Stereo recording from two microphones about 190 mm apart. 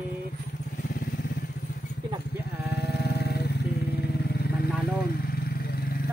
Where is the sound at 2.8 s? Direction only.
55° left (ahead or behind).